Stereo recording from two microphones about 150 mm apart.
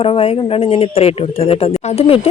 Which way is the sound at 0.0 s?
40° left (ahead or behind).